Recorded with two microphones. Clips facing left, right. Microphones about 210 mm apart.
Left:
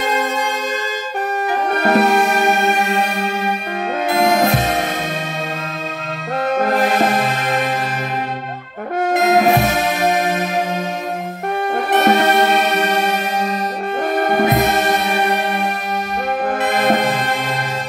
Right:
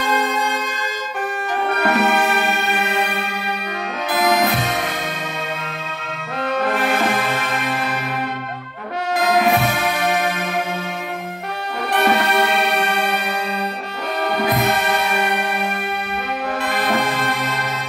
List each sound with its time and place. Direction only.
1.8 s music: 40° left (ahead or behind)
4.1 s music: 25° left (ahead or behind)
4.5 s music: 45° left (ahead or behind)
6.5 s music: 45° left (ahead or behind)
9.1 s brass instrument: 25° left (ahead or behind)
9.4 s music: 40° left (ahead or behind)
11.9 s music: 20° left (ahead or behind)
14.0 s music: 50° left (ahead or behind)